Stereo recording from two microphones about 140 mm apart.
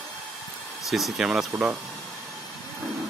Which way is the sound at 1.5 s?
15° right (ahead or behind).